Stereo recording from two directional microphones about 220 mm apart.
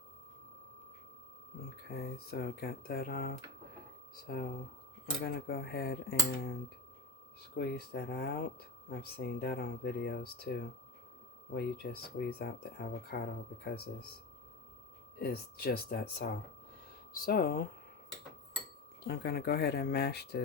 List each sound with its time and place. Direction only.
1.9 s speech: 45° left (ahead or behind)
7.5 s speech: 45° left (ahead or behind)
15.2 s speech: 45° left (ahead or behind)
19.0 s speech: 45° left (ahead or behind)